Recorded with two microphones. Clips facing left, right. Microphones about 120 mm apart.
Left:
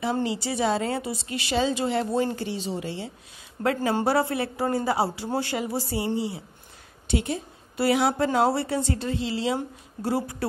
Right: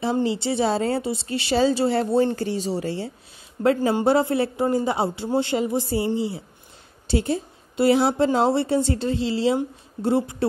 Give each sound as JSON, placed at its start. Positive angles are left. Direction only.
{"t": 0.0, "sound": "a woman's voice", "side_deg": -30}
{"t": 3.9, "sound": "a woman's voice", "side_deg": -25}